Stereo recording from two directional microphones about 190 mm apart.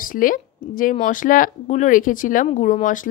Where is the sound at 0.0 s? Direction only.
45° left (ahead or behind).